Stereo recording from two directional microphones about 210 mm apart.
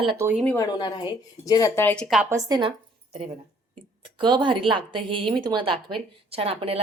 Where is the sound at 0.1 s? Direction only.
10° right (ahead or behind).